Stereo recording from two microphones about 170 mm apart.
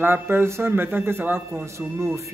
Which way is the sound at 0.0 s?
15° right (ahead or behind).